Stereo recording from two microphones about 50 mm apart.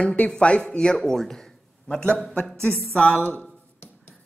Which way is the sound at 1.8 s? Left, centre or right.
Left.